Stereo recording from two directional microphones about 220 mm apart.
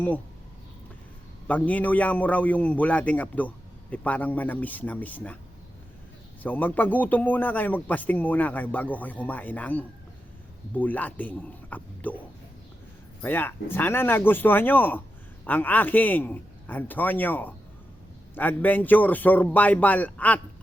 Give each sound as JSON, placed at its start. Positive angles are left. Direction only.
{"t": 1.5, "sound": "a man's voice", "side_deg": 5}
{"t": 6.4, "sound": "a man's voice", "side_deg": 5}
{"t": 13.2, "sound": "a man's voice", "side_deg": 10}